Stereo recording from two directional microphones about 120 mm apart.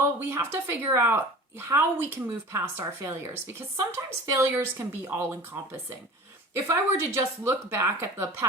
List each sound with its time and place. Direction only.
0.0 s speech: 20° right (ahead or behind)
6.7 s speech: 20° right (ahead or behind)